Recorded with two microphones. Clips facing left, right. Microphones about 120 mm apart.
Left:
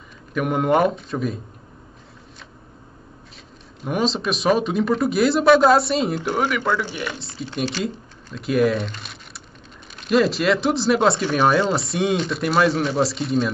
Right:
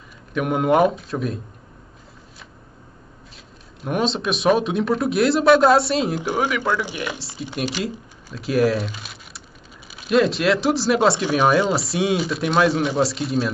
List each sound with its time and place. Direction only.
0.3 s speech: centre (ahead or behind)
3.8 s speech: centre (ahead or behind)
6.1 s speech: 10° right (ahead or behind)
7.8 s speech: centre (ahead or behind)